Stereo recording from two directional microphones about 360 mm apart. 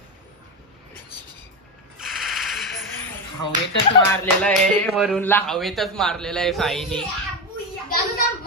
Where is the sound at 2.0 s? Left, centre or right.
Centre.